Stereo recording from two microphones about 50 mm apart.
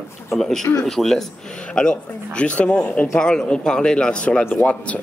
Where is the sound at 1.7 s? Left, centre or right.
Centre.